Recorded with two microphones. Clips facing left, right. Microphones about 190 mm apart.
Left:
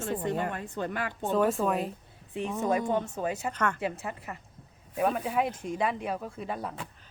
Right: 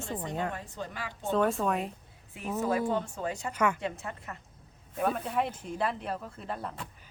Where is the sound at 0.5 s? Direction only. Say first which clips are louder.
Left 6 dB; 60° left (ahead or behind).